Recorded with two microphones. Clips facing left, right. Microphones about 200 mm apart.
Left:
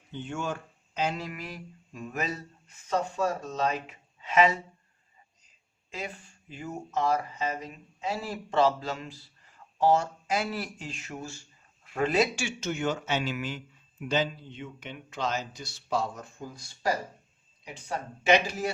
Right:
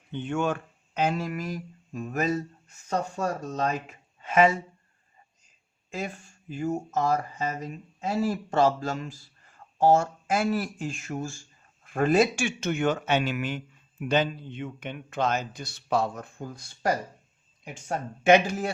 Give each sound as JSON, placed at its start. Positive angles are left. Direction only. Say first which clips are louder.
{"t": 0.1, "sound": "speech", "louder": "right 6 dB", "side_deg": -60}
{"t": 5.9, "sound": "a man's voice", "louder": "right 4 dB", "side_deg": -45}